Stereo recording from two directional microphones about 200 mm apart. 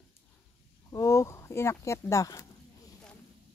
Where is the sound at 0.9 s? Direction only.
15° left (ahead or behind).